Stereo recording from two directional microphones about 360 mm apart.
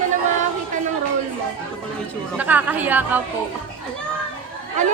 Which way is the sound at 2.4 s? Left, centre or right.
Centre.